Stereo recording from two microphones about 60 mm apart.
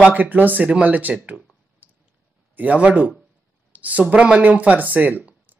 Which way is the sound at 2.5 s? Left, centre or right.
Right.